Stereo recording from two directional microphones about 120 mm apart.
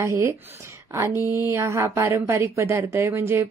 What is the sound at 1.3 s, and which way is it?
A woman's voice, 20° right (ahead or behind).